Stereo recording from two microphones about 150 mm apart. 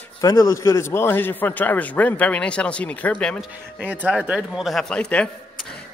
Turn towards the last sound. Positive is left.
turn(degrees=5)  # may be behind; listen again after turning